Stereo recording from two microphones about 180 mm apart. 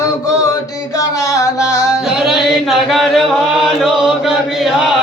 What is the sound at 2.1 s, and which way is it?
Chant, centre (ahead or behind).